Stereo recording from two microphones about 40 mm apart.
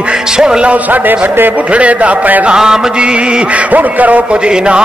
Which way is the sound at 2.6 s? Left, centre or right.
Centre.